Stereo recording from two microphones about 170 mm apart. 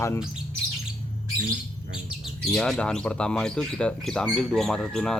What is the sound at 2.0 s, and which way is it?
Speech, centre (ahead or behind).